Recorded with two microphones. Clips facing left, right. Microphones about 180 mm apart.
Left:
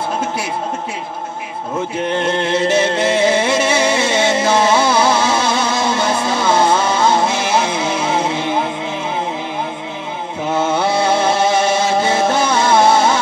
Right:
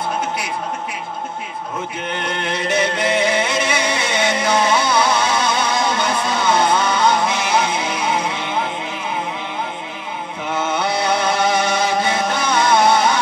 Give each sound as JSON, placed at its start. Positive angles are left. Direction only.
{"t": 2.1, "sound": "music", "side_deg": 25}
{"t": 10.5, "sound": "music", "side_deg": 25}